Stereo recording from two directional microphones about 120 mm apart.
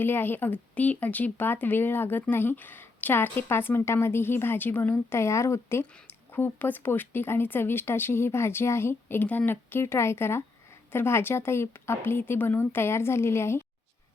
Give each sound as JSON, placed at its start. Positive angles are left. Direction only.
{"t": 0.0, "sound": "a woman's voice", "side_deg": 15}